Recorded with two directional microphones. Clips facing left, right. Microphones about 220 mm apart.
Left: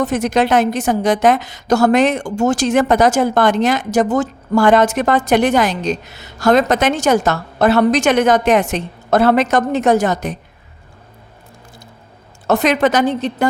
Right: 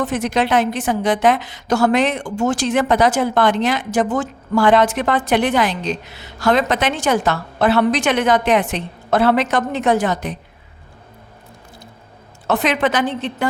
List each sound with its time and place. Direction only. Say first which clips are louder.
0.0 s a woman's voice: left 3 dB; 45° left (ahead or behind)
12.5 s a woman's voice: left 4 dB; 40° left (ahead or behind)